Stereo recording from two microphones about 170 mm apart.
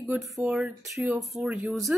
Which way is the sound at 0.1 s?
5° right (ahead or behind).